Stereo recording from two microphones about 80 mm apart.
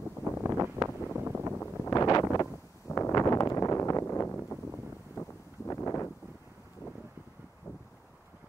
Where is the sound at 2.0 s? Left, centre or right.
Left.